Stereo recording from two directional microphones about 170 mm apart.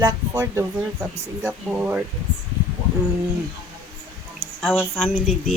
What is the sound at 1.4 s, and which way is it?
Speech, 10° right (ahead or behind).